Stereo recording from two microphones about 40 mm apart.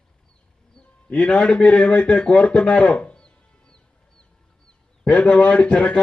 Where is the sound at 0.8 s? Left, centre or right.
Left.